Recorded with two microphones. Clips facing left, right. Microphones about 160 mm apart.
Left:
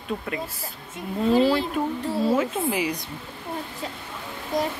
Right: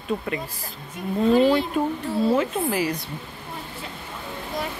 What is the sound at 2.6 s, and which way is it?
Speech, 10° left (ahead or behind).